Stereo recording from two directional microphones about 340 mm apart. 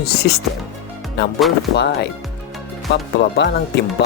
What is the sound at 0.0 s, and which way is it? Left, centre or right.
Speech, left.